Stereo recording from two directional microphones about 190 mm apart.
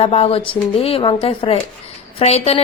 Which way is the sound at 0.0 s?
30° left (ahead or behind).